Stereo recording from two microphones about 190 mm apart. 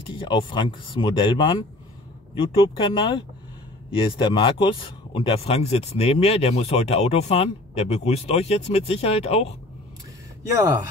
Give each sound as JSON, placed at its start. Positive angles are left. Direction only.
{"t": 0.1, "sound": "speech", "side_deg": 25}